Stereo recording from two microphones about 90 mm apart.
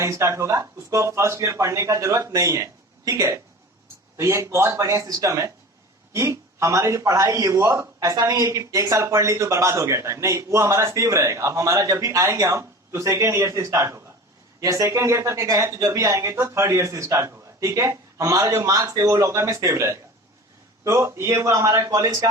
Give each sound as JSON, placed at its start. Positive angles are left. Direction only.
{"t": 0.0, "sound": "speech", "side_deg": -35}